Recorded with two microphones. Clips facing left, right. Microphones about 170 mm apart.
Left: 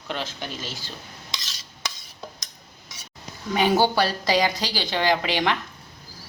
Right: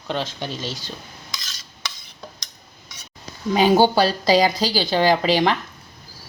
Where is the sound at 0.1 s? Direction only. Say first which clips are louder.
Right 5 dB; 25° right (ahead or behind).